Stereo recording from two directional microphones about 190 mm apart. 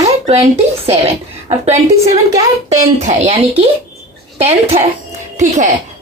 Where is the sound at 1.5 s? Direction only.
35° right (ahead or behind).